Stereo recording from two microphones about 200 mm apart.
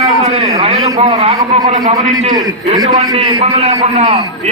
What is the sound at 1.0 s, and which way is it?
Speech, 30° right (ahead or behind).